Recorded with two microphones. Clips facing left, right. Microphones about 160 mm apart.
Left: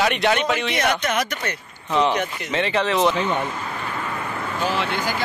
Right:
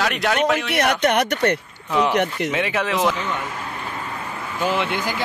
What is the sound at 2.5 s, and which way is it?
Speech, 10° right (ahead or behind).